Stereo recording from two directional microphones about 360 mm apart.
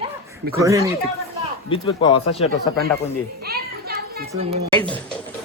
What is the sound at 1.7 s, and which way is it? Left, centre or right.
Speech, centre.